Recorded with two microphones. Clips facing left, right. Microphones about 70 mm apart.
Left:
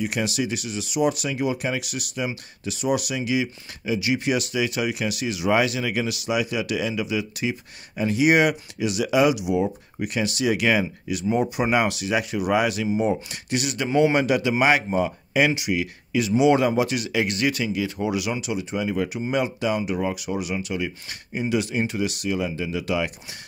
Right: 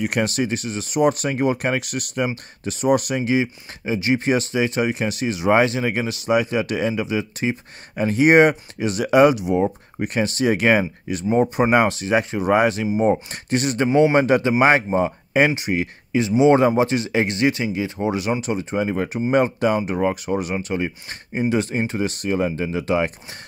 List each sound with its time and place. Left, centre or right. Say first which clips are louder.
0.0 s speech: right 4 dB; right